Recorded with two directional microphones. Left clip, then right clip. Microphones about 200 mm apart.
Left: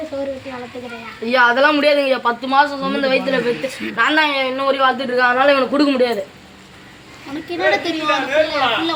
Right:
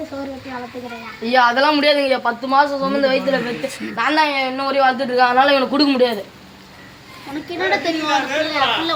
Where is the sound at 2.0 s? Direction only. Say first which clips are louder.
Left 1 dB; 20° right (ahead or behind).